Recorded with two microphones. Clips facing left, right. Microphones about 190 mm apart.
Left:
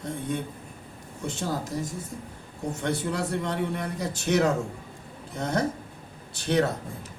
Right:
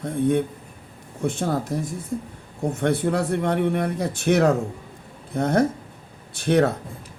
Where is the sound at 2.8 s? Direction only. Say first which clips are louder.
Right 7 dB; 55° right (ahead or behind).